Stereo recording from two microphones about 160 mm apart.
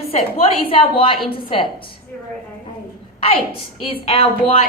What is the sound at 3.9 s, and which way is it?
Speech, 35° left (ahead or behind).